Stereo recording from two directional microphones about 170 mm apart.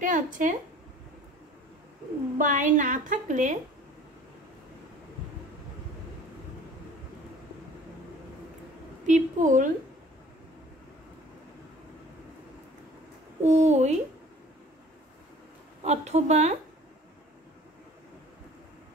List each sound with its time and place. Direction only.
0.0 s a woman's voice: 50° right (ahead or behind)
2.3 s a woman's voice: 50° right (ahead or behind)
9.0 s a woman's voice: 50° right (ahead or behind)
13.4 s a woman's voice: 40° right (ahead or behind)
15.8 s a woman's voice: 40° right (ahead or behind)